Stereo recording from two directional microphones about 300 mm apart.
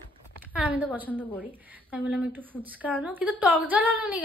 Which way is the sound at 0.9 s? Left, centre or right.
Centre.